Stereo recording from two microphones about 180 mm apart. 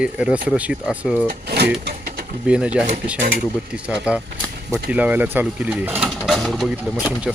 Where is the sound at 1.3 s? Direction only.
65° right (ahead or behind).